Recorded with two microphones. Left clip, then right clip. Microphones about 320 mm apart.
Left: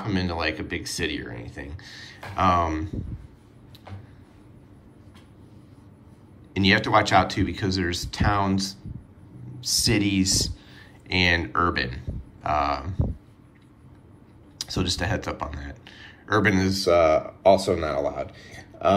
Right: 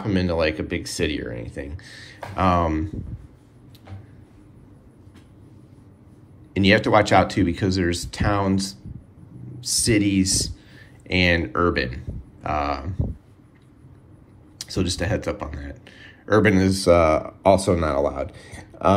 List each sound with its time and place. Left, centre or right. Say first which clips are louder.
0.0 s speech: right 5 dB; centre
6.5 s speech: right 3 dB; centre
14.6 s speech: right 1 dB; centre